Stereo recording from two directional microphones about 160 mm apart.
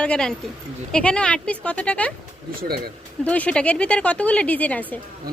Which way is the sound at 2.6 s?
75° right (ahead or behind).